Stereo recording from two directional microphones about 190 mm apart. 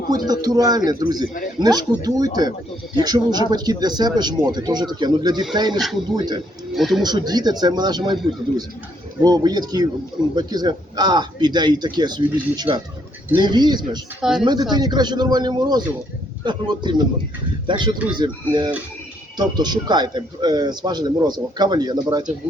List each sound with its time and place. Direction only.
0.1 s a man's voice: 20° right (ahead or behind)
1.2 s speech: 45° left (ahead or behind)
1.5 s a man's voice: 20° right (ahead or behind)
6.7 s speech: centre (ahead or behind)
7.0 s a man's voice: 20° right (ahead or behind)
14.2 s speech: centre (ahead or behind)
14.4 s a man's voice: 20° right (ahead or behind)